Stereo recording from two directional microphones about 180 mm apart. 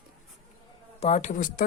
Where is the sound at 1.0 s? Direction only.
40° left (ahead or behind).